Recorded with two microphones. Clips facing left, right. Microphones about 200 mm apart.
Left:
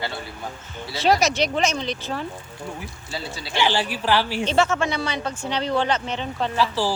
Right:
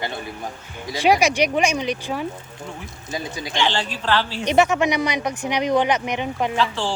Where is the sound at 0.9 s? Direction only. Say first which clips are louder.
Right 2 dB; 15° right (ahead or behind).